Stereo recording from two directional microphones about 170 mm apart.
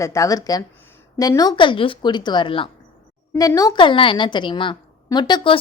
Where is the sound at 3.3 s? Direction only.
20° left (ahead or behind).